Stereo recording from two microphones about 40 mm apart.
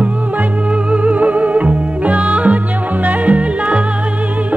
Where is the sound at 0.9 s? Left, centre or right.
Right.